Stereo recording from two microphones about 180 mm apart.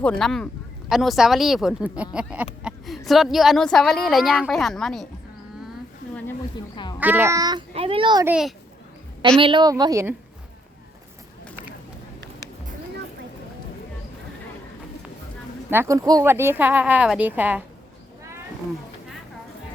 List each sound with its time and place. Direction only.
0.0 s a woman's voice: 5° left (ahead or behind)
2.6 s a sound: centre (ahead or behind)
3.1 s a woman's voice: centre (ahead or behind)
7.0 s speech: 10° right (ahead or behind)
7.7 s speech: 30° right (ahead or behind)
8.2 s a woman's voice: 5° right (ahead or behind)
9.4 s a woman's voice: 25° right (ahead or behind)
15.7 s speech: 15° right (ahead or behind)